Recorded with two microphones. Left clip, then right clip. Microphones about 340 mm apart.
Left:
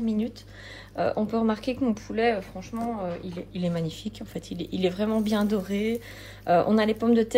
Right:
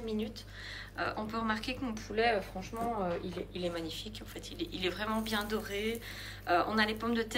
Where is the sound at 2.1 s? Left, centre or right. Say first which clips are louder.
Left 4 dB; centre.